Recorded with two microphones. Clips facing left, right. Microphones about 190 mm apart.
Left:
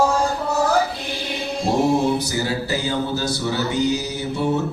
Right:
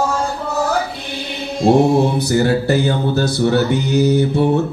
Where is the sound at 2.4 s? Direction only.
60° right (ahead or behind).